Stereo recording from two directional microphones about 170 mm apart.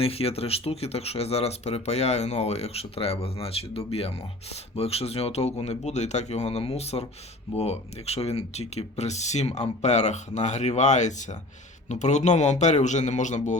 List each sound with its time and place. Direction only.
0.0 s a man's voice: 35° left (ahead or behind)